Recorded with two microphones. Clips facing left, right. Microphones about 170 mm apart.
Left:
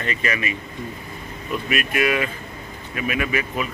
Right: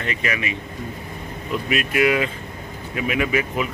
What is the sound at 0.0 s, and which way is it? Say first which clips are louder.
Speech: even; 15° right (ahead or behind).